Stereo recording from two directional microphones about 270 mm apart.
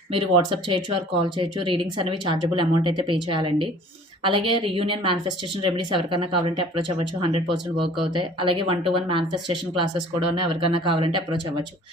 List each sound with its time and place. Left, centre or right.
0.1 s speech: centre